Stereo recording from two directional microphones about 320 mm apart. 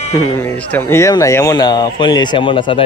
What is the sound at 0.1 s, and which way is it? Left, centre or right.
Speech, centre.